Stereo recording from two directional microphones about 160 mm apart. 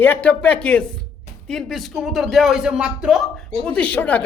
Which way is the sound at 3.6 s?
10° left (ahead or behind).